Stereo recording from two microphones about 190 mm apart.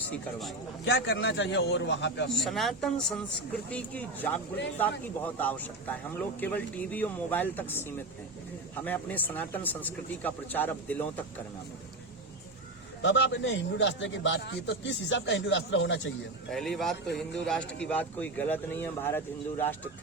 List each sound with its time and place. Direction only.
0.9 s a man's voice: 65° left (ahead or behind)
2.3 s speech: centre (ahead or behind)
13.0 s a man's voice: 75° left (ahead or behind)
16.5 s speech: centre (ahead or behind)